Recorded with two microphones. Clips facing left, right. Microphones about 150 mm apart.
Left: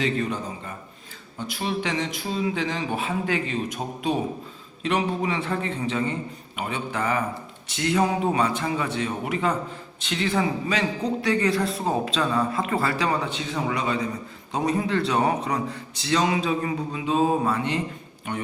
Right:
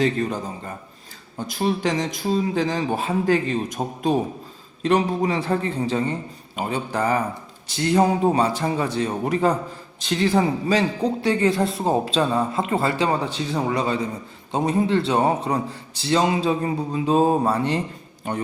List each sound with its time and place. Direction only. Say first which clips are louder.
0.0 s a man's voice: right 4 dB; 40° right (ahead or behind)
1.4 s a man's voice: right 5 dB; 40° right (ahead or behind)